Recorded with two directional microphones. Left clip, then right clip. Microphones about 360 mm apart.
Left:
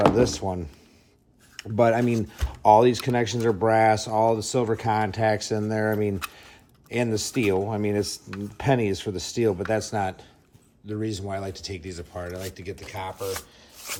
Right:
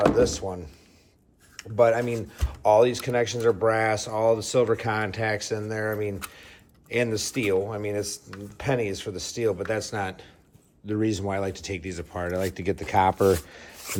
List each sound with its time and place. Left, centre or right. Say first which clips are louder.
0.0 s speech: left 1 dB; centre
1.7 s speech: even; centre
2.4 s a sound: left 2 dB; centre
2.7 s speech: left 1 dB; centre
6.3 s a sound: even; centre
7.7 s speech: left 3 dB; centre